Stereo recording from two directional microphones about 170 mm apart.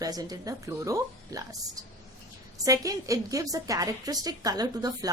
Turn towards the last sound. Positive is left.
turn(degrees=-20)  # may be behind; listen again after turning